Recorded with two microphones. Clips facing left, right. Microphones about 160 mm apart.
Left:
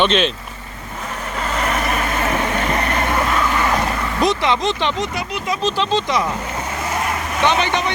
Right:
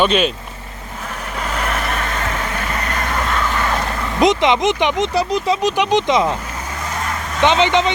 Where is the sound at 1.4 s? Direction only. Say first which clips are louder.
Left 1 dB; centre (ahead or behind); by 3.1 s 25° left (ahead or behind).